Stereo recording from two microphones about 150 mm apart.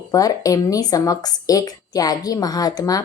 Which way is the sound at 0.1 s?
25° left (ahead or behind).